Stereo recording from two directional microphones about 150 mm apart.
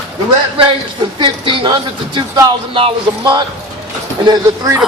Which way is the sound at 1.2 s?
35° right (ahead or behind).